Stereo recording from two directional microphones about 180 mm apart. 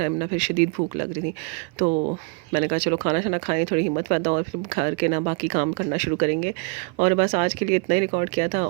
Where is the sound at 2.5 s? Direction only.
40° right (ahead or behind).